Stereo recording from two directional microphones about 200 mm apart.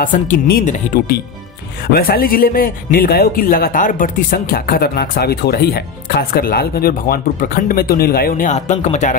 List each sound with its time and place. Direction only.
0.0 s speech: 40° left (ahead or behind)